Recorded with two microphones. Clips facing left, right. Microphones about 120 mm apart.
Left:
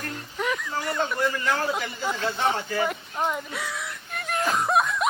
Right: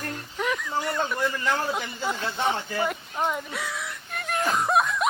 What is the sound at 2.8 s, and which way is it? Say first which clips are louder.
Whimper: right 3 dB; centre (ahead or behind).